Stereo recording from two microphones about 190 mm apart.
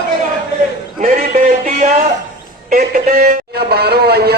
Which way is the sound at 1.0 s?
40° right (ahead or behind).